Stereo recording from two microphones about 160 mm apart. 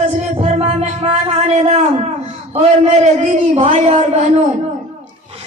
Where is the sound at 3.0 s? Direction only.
45° right (ahead or behind).